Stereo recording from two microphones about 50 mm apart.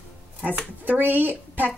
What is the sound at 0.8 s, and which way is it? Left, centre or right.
Speech, right.